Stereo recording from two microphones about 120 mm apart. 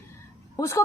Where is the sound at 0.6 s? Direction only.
25° left (ahead or behind).